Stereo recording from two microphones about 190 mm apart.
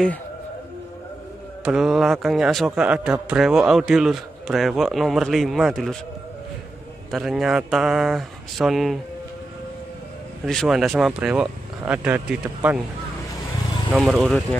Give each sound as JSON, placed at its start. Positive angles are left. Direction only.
{"t": 1.6, "sound": "a man's voice", "side_deg": -5}
{"t": 7.1, "sound": "a man's voice", "side_deg": 0}
{"t": 10.4, "sound": "a man's voice", "side_deg": 0}
{"t": 13.8, "sound": "a man's voice", "side_deg": 0}